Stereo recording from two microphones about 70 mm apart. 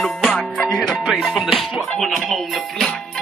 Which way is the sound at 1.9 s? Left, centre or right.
Centre.